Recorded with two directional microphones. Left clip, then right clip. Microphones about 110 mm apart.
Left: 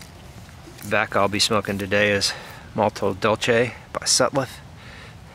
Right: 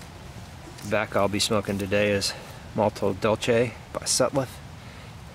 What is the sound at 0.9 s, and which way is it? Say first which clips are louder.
Speech: left 4 dB; 30° left (ahead or behind).